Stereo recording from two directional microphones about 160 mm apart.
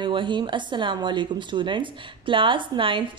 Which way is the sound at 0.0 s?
30° right (ahead or behind).